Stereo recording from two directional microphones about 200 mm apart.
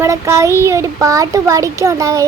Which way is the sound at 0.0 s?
15° right (ahead or behind).